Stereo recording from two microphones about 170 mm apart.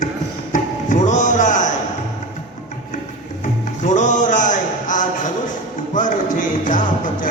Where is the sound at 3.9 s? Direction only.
50° left (ahead or behind).